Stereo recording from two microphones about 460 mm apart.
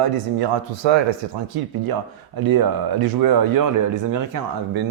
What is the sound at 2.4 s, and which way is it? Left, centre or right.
A man's voice, right.